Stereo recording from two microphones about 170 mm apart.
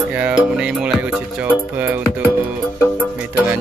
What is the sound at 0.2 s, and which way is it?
Music, 5° right (ahead or behind).